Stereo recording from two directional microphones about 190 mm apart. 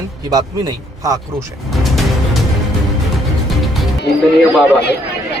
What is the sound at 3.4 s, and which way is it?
Music, centre (ahead or behind).